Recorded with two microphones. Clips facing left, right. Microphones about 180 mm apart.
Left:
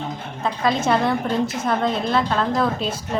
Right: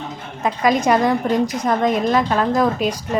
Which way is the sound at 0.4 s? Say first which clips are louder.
Right 4 dB; 15° right (ahead or behind).